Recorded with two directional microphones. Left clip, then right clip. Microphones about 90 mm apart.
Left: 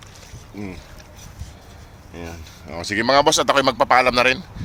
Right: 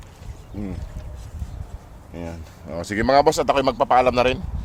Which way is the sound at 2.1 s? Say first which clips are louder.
Even; 75° right (ahead or behind).